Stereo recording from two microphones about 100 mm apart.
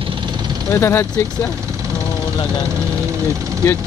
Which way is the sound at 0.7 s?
25° left (ahead or behind).